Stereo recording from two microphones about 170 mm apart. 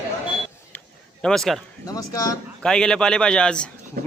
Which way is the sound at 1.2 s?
Centre (ahead or behind).